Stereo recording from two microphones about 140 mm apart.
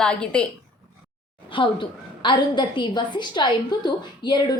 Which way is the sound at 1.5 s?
35° left (ahead or behind).